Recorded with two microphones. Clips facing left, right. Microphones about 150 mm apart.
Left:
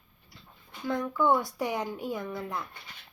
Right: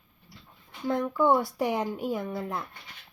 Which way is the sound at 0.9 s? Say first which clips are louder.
Right 2 dB; 30° right (ahead or behind).